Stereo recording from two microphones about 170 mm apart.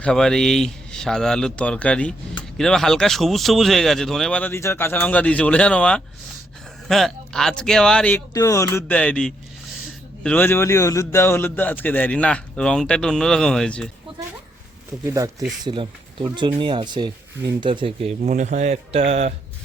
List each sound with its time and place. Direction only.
0.0 s speech: 5° left (ahead or behind)
8.3 s a man's voice: 20° left (ahead or behind)
15.1 s speech: 20° right (ahead or behind)
18.2 s speech: 45° right (ahead or behind)